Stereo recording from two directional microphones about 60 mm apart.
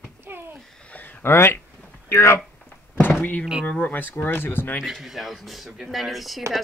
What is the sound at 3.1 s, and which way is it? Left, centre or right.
Speech, left.